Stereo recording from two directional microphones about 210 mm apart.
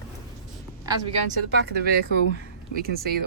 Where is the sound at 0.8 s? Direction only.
20° right (ahead or behind).